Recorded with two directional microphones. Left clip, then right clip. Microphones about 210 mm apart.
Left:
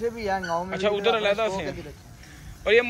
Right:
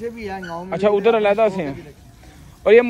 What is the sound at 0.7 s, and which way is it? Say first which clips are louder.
A man's voice: right 9 dB; 30° right (ahead or behind).